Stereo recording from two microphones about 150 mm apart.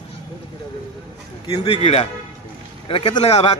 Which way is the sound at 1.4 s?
30° left (ahead or behind).